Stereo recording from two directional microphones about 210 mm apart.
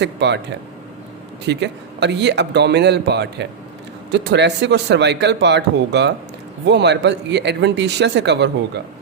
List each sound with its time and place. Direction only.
0.0 s speech: 55° right (ahead or behind)
1.5 s speech: 55° right (ahead or behind)